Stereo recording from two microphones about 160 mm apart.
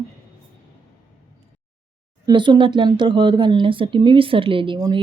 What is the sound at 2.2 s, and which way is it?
A woman's voice, 30° right (ahead or behind).